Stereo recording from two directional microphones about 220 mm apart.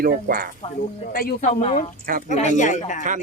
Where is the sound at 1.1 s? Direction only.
40° left (ahead or behind).